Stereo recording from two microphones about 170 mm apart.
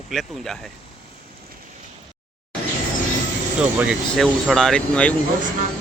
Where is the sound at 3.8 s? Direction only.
5° right (ahead or behind).